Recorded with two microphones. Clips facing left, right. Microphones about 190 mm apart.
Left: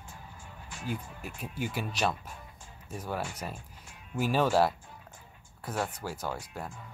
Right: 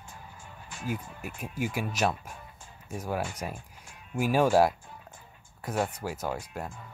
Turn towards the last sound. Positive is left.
turn(degrees=-5)  # may be behind; listen again after turning